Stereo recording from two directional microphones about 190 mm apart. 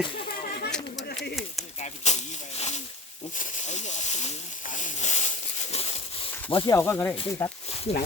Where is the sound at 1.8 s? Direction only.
35° left (ahead or behind).